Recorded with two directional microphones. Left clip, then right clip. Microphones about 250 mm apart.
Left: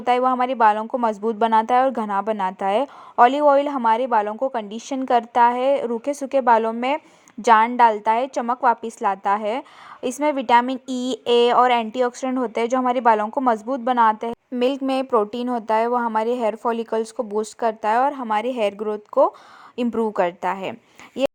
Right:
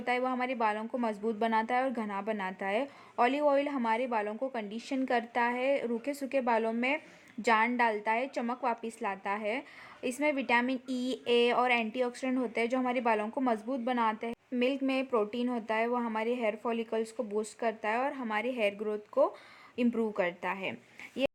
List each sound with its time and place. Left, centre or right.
0.0 s a woman's voice: left